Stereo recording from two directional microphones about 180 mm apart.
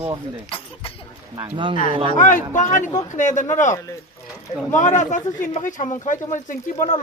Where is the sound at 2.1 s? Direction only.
45° left (ahead or behind).